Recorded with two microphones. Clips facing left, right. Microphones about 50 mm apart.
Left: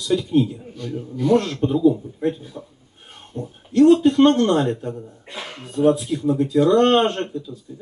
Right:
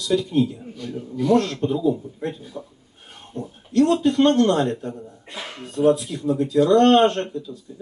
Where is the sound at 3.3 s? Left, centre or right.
Right.